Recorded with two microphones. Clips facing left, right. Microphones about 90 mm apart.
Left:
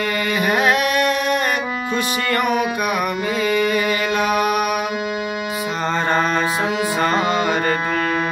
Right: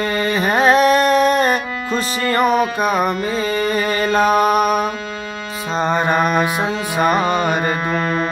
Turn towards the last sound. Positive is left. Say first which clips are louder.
# right 1 dB
turn(degrees=-20)  # may be behind; listen again after turning